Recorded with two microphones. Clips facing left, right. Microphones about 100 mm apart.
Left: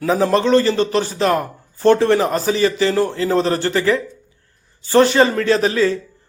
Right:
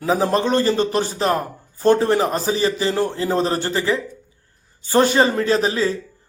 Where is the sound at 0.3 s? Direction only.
45° right (ahead or behind).